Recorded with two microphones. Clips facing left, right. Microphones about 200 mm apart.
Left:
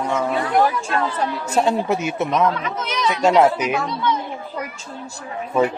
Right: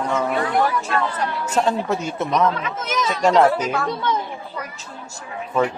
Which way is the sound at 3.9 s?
50° right (ahead or behind).